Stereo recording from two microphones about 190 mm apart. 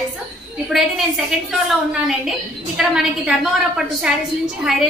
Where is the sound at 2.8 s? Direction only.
5° right (ahead or behind).